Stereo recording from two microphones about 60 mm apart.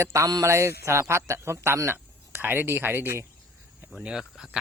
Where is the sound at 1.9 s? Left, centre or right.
Right.